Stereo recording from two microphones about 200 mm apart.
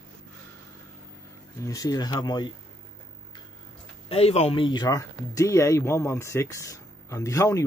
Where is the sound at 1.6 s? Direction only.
15° left (ahead or behind).